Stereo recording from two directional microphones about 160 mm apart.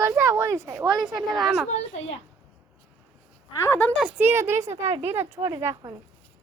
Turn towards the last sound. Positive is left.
turn(degrees=-20)  # may be behind; listen again after turning